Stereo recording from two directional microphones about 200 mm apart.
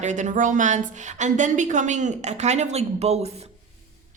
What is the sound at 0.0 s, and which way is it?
A woman's voice, 35° right (ahead or behind).